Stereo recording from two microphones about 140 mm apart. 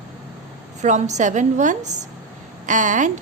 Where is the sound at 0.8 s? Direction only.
60° right (ahead or behind).